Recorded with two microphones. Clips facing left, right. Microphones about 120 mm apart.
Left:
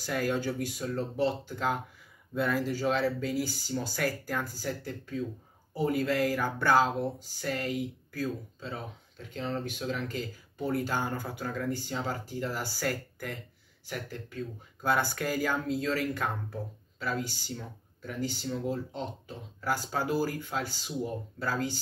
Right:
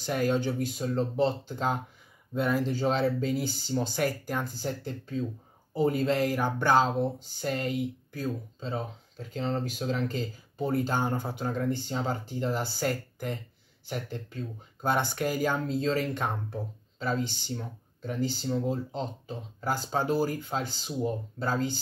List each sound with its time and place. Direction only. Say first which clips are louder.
0.0 s speech: right 3 dB; 20° right (ahead or behind)
15.7 s speech: right 2 dB; 30° right (ahead or behind)